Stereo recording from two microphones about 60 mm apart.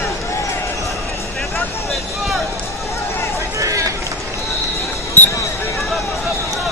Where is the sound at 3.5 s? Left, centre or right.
Right.